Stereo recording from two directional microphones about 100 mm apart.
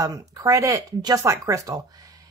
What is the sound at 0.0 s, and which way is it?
A woman's voice, 35° right (ahead or behind).